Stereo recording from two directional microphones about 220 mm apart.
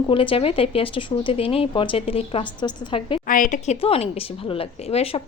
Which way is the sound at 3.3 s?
35° left (ahead or behind).